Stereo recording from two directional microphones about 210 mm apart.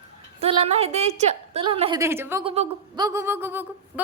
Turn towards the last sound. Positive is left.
turn(degrees=-10)  # may be behind; listen again after turning